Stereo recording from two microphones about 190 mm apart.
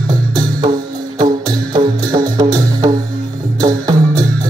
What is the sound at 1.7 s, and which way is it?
Music, 25° right (ahead or behind).